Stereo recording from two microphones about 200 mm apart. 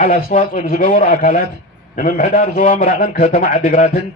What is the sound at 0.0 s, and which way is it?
A man's voice, 40° left (ahead or behind).